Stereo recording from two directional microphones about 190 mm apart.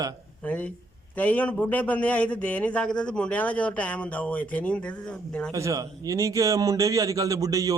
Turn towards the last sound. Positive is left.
turn(degrees=-15)  # may be behind; listen again after turning